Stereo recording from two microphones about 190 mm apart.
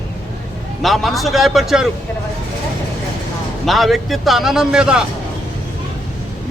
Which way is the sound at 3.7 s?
Centre (ahead or behind).